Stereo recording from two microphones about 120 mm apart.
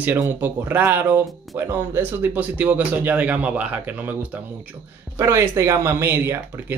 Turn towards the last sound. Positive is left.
turn(degrees=-20)  # may be behind; listen again after turning